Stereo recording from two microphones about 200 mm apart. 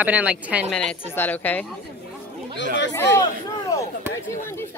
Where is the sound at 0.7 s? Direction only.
5° left (ahead or behind).